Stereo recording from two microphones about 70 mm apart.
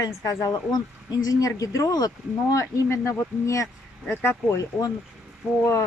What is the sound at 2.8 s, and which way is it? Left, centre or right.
Speech, left.